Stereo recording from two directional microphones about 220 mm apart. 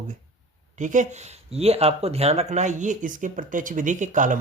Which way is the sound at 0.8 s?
35° right (ahead or behind).